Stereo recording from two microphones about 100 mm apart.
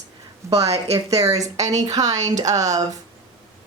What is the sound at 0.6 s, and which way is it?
Speech, 90° right.